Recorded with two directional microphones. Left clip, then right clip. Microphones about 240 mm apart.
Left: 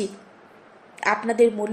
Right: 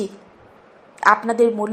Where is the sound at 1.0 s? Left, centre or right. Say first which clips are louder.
Right 4 dB; centre.